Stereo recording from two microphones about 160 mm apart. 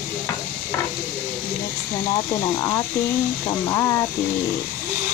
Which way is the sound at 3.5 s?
20° left (ahead or behind).